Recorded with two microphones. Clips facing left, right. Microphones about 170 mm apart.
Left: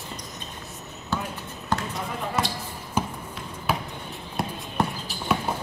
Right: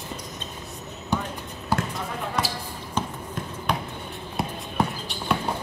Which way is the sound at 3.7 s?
5° left (ahead or behind).